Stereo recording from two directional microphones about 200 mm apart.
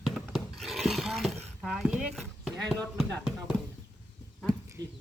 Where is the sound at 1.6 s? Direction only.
Centre (ahead or behind).